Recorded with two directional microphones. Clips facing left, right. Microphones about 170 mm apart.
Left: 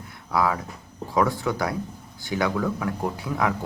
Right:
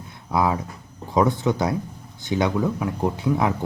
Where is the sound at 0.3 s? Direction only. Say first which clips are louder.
Right 2 dB; 20° right (ahead or behind).